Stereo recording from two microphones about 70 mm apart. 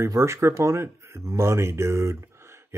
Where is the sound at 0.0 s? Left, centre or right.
Right.